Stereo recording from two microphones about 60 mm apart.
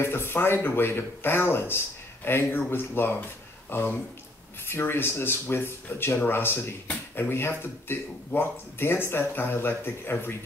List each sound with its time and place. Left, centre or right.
0.0 s speech: left